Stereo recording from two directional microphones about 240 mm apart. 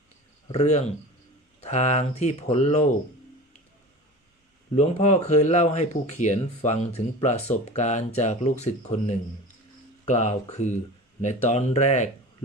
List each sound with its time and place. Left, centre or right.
0.4 s speech: left
4.8 s speech: left